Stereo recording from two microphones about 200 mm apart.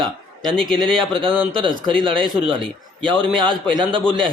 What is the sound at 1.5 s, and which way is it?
Speech, 25° right (ahead or behind).